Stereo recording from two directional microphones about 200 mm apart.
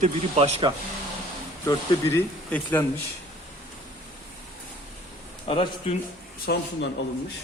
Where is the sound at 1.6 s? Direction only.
15° left (ahead or behind).